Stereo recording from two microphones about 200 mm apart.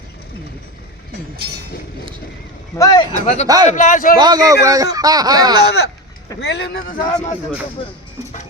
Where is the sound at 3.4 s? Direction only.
20° right (ahead or behind).